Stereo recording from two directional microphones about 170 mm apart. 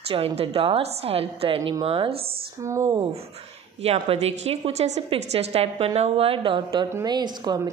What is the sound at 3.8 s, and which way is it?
A woman's voice, 35° right (ahead or behind).